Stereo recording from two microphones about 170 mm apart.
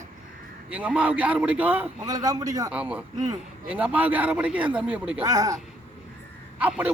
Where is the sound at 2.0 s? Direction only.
20° right (ahead or behind).